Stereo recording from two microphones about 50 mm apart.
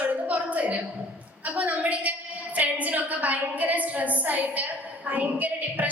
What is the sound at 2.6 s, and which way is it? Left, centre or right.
A woman's voice, right.